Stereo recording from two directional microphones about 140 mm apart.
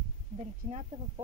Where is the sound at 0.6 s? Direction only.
55° right (ahead or behind).